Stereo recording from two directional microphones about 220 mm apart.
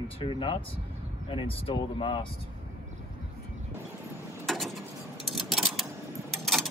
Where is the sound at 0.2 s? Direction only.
25° left (ahead or behind).